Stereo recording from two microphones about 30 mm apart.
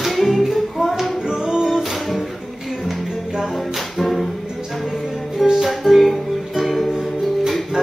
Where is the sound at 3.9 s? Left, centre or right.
Centre.